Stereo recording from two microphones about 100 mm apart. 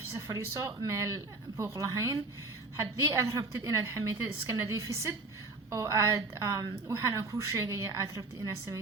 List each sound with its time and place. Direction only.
0.1 s a woman's voice: 30° right (ahead or behind)